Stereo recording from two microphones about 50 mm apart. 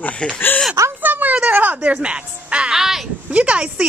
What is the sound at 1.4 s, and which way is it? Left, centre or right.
Speech, right.